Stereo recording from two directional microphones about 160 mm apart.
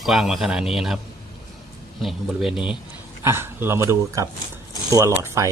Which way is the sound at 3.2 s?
15° right (ahead or behind).